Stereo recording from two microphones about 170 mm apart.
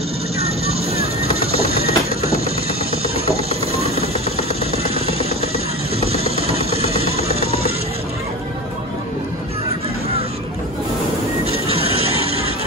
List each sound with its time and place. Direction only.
0.4 s music: 35° right (ahead or behind)
3.3 s a sound: 35° right (ahead or behind)
4.8 s music: 35° right (ahead or behind)
11.4 s music: 35° right (ahead or behind)